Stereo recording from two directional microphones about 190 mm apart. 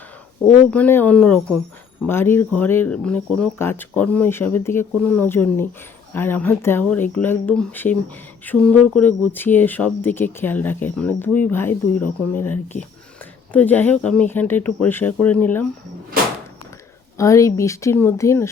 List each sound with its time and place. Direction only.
0.4 s speech: 10° left (ahead or behind)
17.2 s speech: 15° left (ahead or behind)